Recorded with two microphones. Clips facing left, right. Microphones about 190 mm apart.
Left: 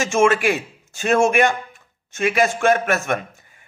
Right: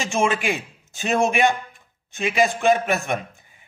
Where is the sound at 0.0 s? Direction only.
15° right (ahead or behind).